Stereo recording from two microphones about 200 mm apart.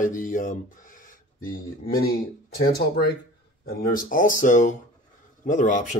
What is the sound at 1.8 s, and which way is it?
Speech, 50° left (ahead or behind).